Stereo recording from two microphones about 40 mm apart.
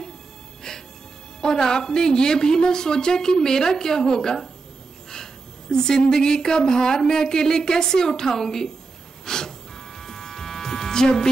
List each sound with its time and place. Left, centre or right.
0.7 s music: centre
1.4 s a woman's voice: centre
9.2 s gasp: centre
9.9 s music: centre